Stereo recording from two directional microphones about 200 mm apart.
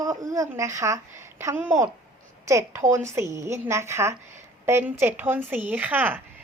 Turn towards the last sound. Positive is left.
turn(degrees=-10)  # may be behind; listen again after turning